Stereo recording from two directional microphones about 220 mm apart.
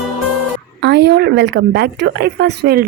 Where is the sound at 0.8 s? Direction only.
50° right (ahead or behind).